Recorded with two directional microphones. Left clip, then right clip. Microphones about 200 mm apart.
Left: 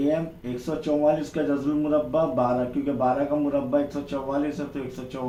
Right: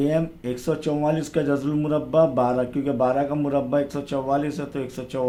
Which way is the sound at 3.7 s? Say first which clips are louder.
Right 2 dB; 50° right (ahead or behind).